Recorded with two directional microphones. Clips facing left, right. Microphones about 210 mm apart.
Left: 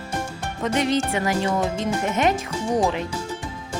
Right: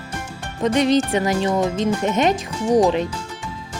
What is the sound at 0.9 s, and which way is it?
Speech, 20° right (ahead or behind).